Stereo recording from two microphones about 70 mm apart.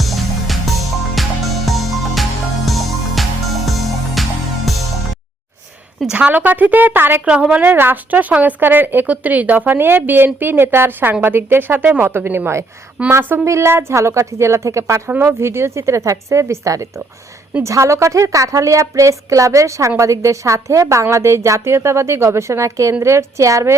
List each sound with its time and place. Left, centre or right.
0.0 s music: centre
6.1 s a woman's voice: centre
7.3 s a woman's voice: centre
7.6 s a woman's voice: right